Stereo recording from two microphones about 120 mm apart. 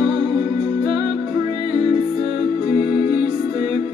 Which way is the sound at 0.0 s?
45° right (ahead or behind).